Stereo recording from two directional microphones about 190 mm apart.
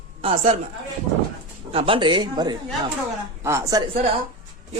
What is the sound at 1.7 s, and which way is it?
A man's voice, 30° right (ahead or behind).